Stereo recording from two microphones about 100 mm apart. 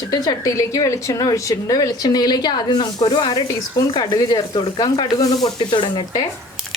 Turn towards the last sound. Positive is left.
turn(degrees=50)  # may be behind; listen again after turning